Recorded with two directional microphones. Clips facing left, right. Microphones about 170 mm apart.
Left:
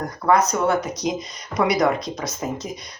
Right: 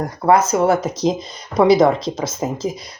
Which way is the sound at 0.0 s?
30° right (ahead or behind).